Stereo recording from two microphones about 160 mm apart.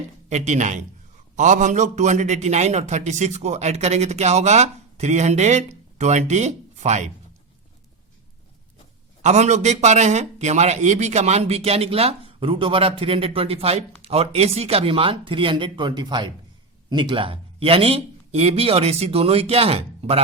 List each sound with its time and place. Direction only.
0.3 s a man's voice: 45° right (ahead or behind)
9.2 s a man's voice: 45° right (ahead or behind)